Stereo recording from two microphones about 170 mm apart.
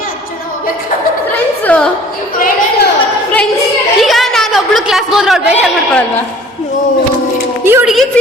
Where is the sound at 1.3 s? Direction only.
10° left (ahead or behind).